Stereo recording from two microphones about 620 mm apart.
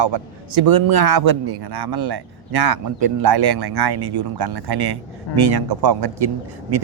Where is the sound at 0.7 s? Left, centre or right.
Right.